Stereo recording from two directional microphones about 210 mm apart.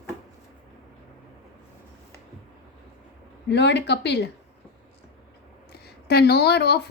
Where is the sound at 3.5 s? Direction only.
55° left (ahead or behind).